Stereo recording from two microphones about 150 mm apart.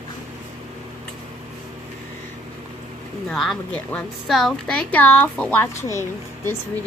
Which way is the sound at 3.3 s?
Centre (ahead or behind).